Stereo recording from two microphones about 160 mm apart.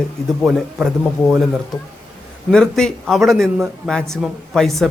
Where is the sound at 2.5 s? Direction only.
5° left (ahead or behind).